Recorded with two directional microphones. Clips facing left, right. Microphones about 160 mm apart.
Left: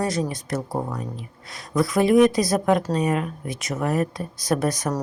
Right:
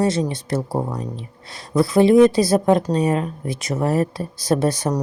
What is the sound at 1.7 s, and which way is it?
Speech, 30° right (ahead or behind).